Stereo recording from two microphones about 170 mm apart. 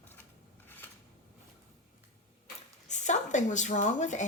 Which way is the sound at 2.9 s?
45° left (ahead or behind).